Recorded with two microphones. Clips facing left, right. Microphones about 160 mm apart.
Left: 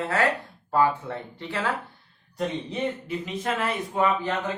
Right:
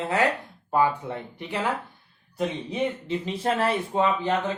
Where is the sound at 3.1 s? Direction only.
30° right (ahead or behind).